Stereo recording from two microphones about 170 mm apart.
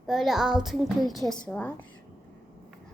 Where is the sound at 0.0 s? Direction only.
Centre (ahead or behind).